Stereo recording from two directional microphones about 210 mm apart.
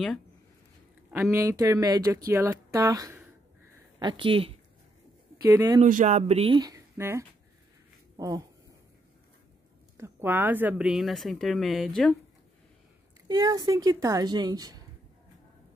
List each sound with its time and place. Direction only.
1.1 s speech: 10° right (ahead or behind)
5.4 s speech: 15° right (ahead or behind)
5.8 s speech: 35° right (ahead or behind); by 7.2 s 15° right (ahead or behind)
9.9 s speech: 10° right (ahead or behind)
13.3 s speech: 15° right (ahead or behind)